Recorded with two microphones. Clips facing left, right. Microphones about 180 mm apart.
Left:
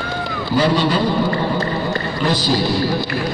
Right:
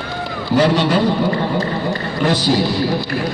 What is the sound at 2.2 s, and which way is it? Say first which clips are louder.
Speech: right 3 dB; 65° right (ahead or behind).